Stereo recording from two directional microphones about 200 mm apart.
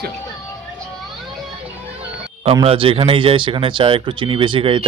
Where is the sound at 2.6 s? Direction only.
25° right (ahead or behind).